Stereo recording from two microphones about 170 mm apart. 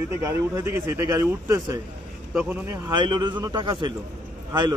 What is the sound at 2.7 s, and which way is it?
A man's voice, 25° right (ahead or behind).